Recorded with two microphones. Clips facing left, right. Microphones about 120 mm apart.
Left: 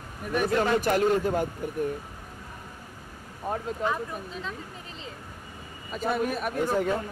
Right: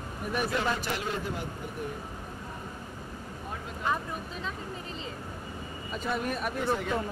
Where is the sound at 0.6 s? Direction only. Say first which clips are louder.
Left 7 dB; 45° left (ahead or behind).